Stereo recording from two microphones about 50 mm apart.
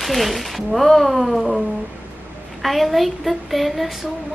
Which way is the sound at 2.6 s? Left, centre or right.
Centre.